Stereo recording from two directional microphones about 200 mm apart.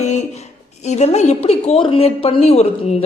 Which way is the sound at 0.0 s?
35° left (ahead or behind).